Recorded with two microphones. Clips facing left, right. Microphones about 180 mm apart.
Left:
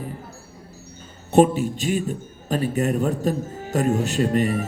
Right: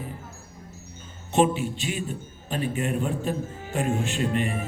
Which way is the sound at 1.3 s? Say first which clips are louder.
Left 6 dB; 40° left (ahead or behind).